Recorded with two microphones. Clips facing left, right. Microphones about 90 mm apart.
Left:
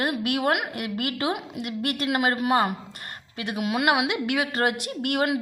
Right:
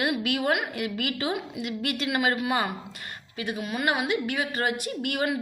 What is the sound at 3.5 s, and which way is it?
A woman's voice, 80° left.